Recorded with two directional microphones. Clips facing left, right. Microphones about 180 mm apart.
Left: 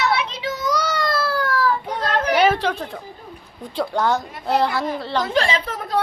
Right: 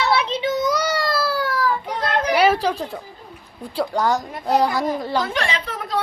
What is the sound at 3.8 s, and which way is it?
A woman's voice, 10° right (ahead or behind).